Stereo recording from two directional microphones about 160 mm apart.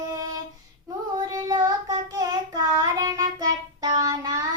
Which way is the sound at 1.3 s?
25° right (ahead or behind).